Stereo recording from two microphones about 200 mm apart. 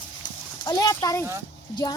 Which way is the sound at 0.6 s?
20° left (ahead or behind).